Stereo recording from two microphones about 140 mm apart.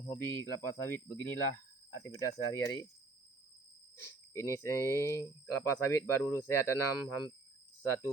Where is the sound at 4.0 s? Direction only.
20° left (ahead or behind).